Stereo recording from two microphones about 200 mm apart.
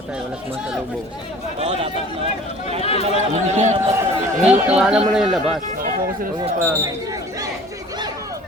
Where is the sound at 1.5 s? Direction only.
30° right (ahead or behind).